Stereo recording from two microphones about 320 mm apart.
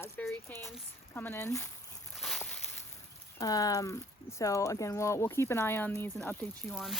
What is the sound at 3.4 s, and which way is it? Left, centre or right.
Speech, centre.